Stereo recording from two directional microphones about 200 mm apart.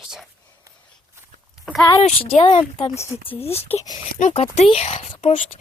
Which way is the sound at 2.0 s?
30° left (ahead or behind).